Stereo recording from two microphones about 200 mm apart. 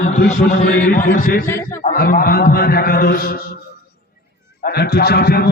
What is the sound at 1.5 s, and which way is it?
Speech, 10° left (ahead or behind).